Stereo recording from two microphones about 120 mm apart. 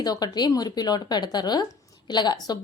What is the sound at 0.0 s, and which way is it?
A woman's voice, 35° left (ahead or behind).